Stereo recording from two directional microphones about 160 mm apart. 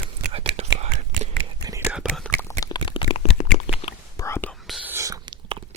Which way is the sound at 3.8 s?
40° left (ahead or behind).